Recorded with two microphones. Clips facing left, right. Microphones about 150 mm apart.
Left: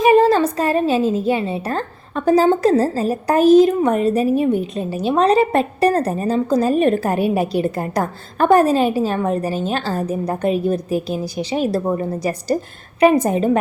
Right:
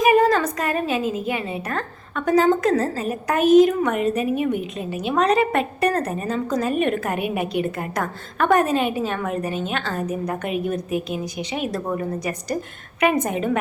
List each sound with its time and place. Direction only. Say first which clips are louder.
0.0 s a woman's voice: left 4 dB; 30° left (ahead or behind)